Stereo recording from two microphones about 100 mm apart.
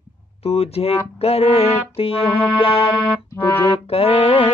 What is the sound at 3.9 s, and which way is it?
Music, 75° left (ahead or behind).